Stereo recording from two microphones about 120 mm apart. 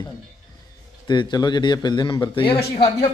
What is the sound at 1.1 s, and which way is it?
A man's voice, 40° left (ahead or behind).